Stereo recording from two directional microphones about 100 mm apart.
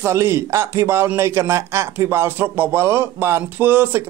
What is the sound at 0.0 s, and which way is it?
Speech, 30° right (ahead or behind).